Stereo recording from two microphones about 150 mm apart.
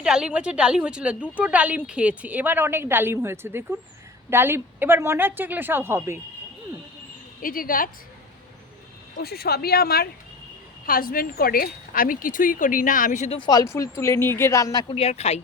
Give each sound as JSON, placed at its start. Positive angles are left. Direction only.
{"t": 0.0, "sound": "a woman's voice", "side_deg": -5}
{"t": 7.4, "sound": "a woman's voice", "side_deg": 70}
{"t": 9.2, "sound": "speech", "side_deg": 90}
{"t": 10.8, "sound": "speech", "side_deg": 75}
{"t": 13.4, "sound": "speech", "side_deg": 25}
{"t": 14.9, "sound": "speech", "side_deg": 45}